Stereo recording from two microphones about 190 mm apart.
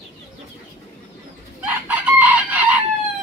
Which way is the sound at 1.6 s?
10° right (ahead or behind).